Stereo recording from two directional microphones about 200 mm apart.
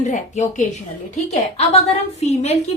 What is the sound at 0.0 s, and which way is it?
A woman's voice, 35° left (ahead or behind).